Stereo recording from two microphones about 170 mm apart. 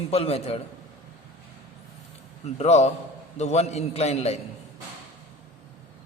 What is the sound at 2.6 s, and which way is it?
A man's voice, 40° left (ahead or behind).